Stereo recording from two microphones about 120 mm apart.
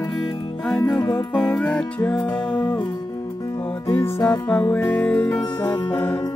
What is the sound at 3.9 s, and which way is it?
Music, 20° left (ahead or behind).